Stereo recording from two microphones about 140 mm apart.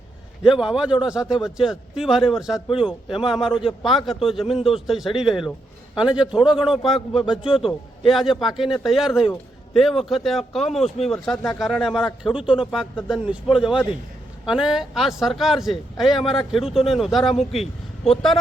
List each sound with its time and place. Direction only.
0.4 s speech: 5° right (ahead or behind)
7.4 s a man's voice: 40° left (ahead or behind)
8.1 s a man's voice: centre (ahead or behind)